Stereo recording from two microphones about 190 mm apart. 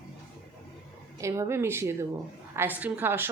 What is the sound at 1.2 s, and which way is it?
A woman's voice, 15° right (ahead or behind).